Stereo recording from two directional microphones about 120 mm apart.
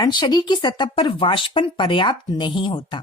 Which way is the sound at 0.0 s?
40° left (ahead or behind).